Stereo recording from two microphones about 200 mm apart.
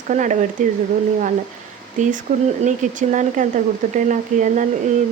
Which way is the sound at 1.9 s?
40° right (ahead or behind).